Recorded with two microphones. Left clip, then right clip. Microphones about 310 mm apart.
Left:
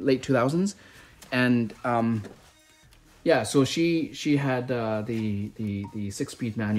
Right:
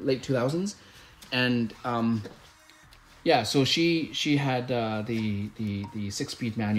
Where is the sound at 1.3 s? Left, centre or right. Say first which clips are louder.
Left 2 dB; centre.